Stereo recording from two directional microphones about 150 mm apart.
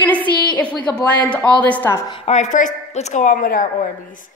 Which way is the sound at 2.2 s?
50° left (ahead or behind).